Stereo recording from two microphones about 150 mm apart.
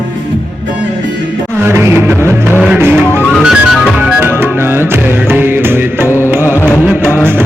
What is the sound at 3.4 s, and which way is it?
Music, 5° right (ahead or behind).